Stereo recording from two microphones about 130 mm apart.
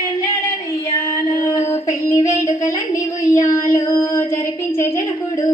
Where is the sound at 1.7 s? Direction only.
25° left (ahead or behind).